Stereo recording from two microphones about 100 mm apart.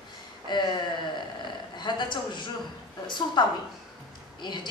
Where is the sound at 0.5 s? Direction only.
50° left (ahead or behind).